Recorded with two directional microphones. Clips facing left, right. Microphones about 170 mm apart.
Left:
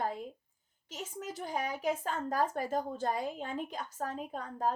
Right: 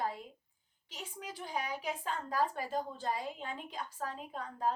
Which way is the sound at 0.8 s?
45° left (ahead or behind).